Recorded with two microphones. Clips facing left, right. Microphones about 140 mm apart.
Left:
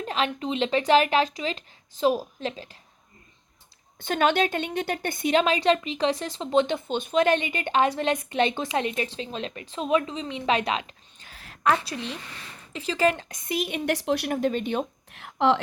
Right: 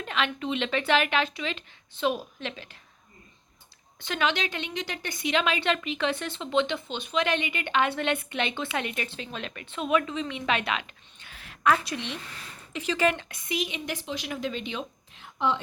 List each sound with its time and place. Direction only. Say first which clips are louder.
0.0 s a woman's voice: left 2 dB; 35° left (ahead or behind)
4.0 s a woman's voice: left 6 dB; 45° left (ahead or behind); by 14.3 s 70° left (ahead or behind)
14.3 s speech: left 7 dB; 50° left (ahead or behind)
15.1 s a woman's voice: left 6 dB; 80° left